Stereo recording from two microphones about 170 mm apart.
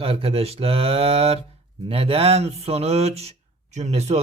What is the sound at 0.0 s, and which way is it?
A man's voice, 35° right (ahead or behind).